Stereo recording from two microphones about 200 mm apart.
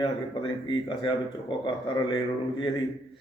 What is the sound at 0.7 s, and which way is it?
Speech, 25° left (ahead or behind).